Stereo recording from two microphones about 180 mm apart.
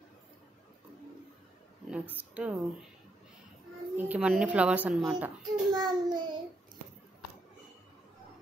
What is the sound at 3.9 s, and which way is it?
A woman's voice, 10° right (ahead or behind).